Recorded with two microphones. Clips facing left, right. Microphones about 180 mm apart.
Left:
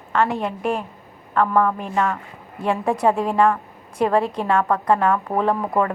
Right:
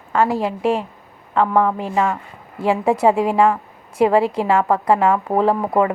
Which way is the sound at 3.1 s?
75° right (ahead or behind).